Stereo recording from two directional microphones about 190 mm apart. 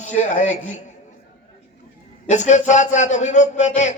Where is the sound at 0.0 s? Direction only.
40° left (ahead or behind).